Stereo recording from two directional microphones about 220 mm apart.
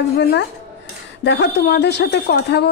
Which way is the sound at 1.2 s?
50° left (ahead or behind).